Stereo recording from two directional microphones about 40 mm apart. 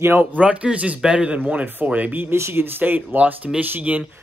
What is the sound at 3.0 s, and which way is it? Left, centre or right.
Speech, right.